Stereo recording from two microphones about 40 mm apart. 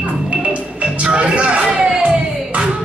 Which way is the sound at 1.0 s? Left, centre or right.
Right.